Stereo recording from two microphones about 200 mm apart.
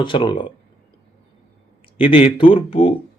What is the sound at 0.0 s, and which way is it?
Speech, 25° left (ahead or behind).